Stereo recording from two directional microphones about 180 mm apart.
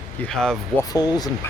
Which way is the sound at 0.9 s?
20° left (ahead or behind).